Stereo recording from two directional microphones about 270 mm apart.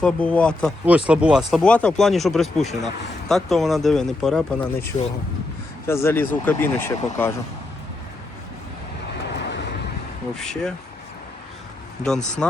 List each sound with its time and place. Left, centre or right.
0.0 s speech: centre
9.2 s vehicle: left
10.3 s speech: centre
12.0 s speech: centre